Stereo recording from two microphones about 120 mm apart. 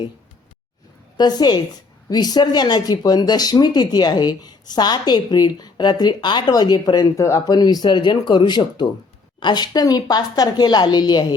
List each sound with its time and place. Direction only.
1.1 s speech: 35° left (ahead or behind)